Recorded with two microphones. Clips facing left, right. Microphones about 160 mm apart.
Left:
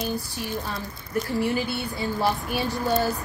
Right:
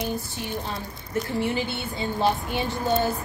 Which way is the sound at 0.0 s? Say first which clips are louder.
Even; 20° right (ahead or behind).